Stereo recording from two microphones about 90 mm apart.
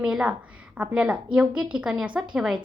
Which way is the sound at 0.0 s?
15° right (ahead or behind).